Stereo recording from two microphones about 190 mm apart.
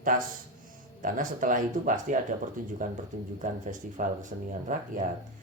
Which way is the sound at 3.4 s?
45° right (ahead or behind).